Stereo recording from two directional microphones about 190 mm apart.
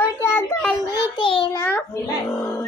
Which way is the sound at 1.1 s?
25° left (ahead or behind).